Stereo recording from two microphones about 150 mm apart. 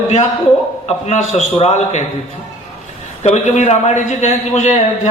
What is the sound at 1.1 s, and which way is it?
Speech, 50° left (ahead or behind).